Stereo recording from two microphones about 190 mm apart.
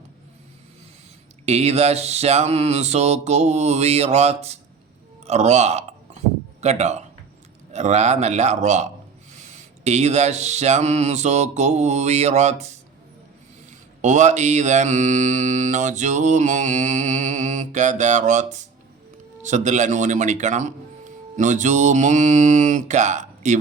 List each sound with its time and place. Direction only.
1.5 s mantra: 35° right (ahead or behind)
5.2 s a sound: 35° right (ahead or behind)
7.7 s mantra: 35° right (ahead or behind)
14.0 s mantra: 40° right (ahead or behind)
19.1 s a man's voice: 40° right (ahead or behind)